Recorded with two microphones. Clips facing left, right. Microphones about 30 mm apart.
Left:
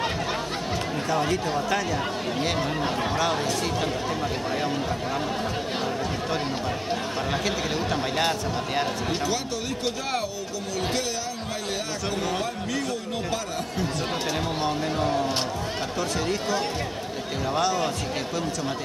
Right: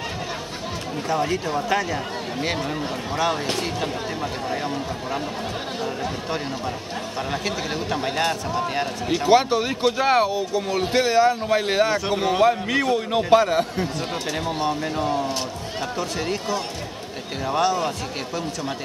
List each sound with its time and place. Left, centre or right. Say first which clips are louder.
1.0 s speech: right 3 dB; centre
1.7 s speech: right 5 dB; centre
3.8 s speech: even; centre
7.4 s speech: even; centre
9.2 s a man's voice: right 10 dB; right
14.6 s speech: right 2 dB; centre